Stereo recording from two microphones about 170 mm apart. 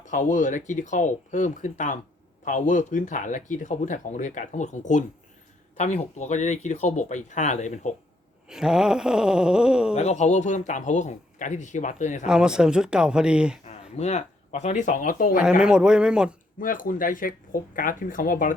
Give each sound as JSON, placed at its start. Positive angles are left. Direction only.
{"t": 0.0, "sound": "speech", "side_deg": 50}
{"t": 8.4, "sound": "groan", "side_deg": -5}
{"t": 9.9, "sound": "speech", "side_deg": 40}
{"t": 12.2, "sound": "groan", "side_deg": -5}
{"t": 13.9, "sound": "speech", "side_deg": 40}
{"t": 15.4, "sound": "groan", "side_deg": -5}
{"t": 16.6, "sound": "speech", "side_deg": 55}